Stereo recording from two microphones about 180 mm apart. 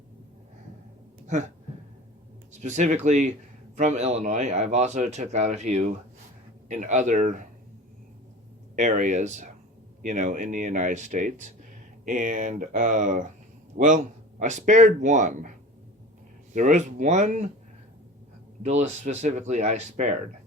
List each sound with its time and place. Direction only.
2.5 s speech: 40° right (ahead or behind)
8.7 s speech: 45° right (ahead or behind)
16.6 s speech: 45° right (ahead or behind)
18.6 s speech: 40° right (ahead or behind)